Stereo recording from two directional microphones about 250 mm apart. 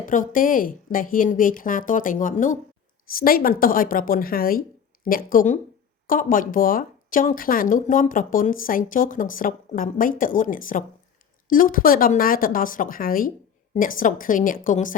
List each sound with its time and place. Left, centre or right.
0.0 s speech: left